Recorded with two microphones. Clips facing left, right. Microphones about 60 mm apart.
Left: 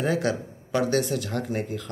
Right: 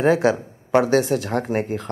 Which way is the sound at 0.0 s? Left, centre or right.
Right.